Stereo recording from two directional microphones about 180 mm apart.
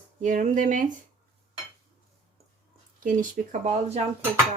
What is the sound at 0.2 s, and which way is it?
Speech, 45° right (ahead or behind).